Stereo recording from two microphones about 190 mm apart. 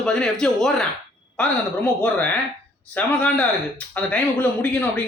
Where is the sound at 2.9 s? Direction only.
5° left (ahead or behind).